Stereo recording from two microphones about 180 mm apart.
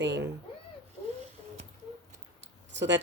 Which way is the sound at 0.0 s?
75° right (ahead or behind).